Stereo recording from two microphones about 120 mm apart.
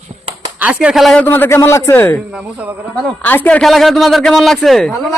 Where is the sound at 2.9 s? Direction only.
10° left (ahead or behind).